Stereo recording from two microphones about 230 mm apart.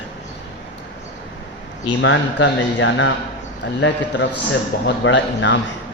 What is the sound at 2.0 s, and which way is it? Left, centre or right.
Speech, left.